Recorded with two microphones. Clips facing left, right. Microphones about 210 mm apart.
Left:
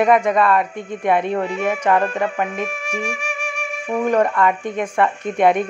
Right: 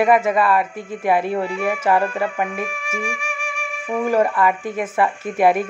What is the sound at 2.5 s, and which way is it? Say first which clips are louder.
Speech: left 2 dB; 40° left (ahead or behind).